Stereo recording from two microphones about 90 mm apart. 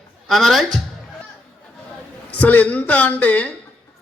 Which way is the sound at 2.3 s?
15° left (ahead or behind).